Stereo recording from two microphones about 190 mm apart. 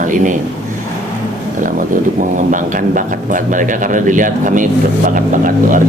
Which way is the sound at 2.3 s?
45° right (ahead or behind).